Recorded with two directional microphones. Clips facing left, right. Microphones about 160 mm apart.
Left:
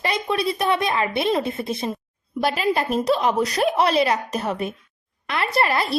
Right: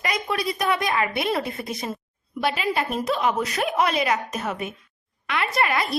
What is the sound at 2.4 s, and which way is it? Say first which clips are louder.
A woman's voice: left 3 dB; 40° left (ahead or behind).